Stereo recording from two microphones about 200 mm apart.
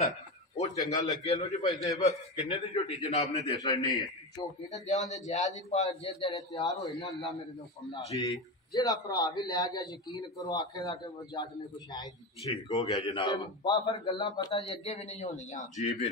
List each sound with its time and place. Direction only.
0.7 s a man's voice: 20° left (ahead or behind)
3.5 s a man's voice: 20° left (ahead or behind)
4.6 s a man's voice: 35° left (ahead or behind)
8.3 s a man's voice: 20° left (ahead or behind); by 16.1 s 40° left (ahead or behind)